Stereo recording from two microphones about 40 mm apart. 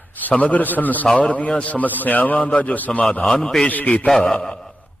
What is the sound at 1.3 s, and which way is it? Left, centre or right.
A man's voice, left.